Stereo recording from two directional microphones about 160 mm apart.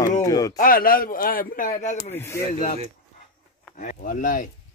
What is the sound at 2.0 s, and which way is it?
Speech, 15° left (ahead or behind).